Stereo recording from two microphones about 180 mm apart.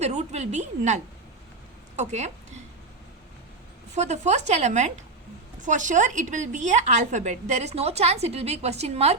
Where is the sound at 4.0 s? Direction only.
40° right (ahead or behind).